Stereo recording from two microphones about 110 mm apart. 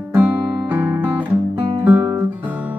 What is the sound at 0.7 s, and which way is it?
Guitar, 20° right (ahead or behind).